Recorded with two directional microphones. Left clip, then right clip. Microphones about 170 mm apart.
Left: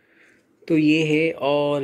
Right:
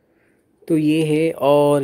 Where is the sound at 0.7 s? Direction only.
25° right (ahead or behind).